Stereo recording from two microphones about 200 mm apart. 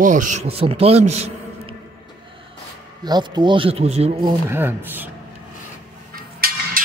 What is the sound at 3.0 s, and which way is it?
Speech, 20° right (ahead or behind).